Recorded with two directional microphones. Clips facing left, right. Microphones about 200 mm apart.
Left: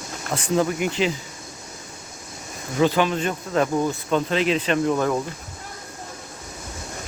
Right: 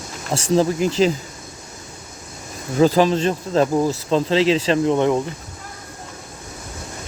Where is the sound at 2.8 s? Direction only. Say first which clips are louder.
Right 5 dB; 35° right (ahead or behind).